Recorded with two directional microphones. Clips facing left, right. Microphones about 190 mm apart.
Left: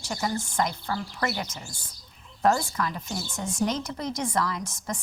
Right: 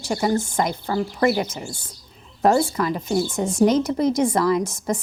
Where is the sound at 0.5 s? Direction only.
20° right (ahead or behind).